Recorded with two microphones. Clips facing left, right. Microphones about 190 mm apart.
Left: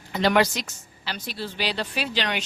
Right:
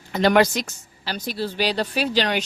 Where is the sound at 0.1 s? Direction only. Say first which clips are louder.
Right 4 dB; 50° right (ahead or behind).